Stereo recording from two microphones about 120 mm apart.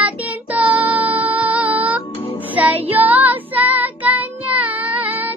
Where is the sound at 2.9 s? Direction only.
15° right (ahead or behind).